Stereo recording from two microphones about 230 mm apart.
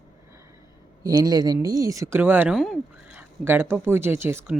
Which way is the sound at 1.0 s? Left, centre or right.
Centre.